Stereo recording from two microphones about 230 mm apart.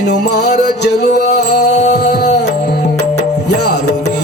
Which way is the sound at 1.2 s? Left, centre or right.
Left.